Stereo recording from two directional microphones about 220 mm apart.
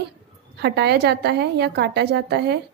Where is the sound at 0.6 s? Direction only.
50° right (ahead or behind).